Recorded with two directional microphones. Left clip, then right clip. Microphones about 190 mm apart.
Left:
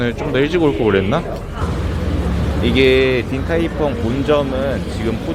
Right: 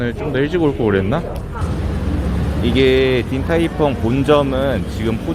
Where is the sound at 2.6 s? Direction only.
5° right (ahead or behind).